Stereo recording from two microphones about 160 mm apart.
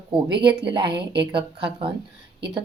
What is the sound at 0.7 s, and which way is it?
A woman's voice, 30° right (ahead or behind).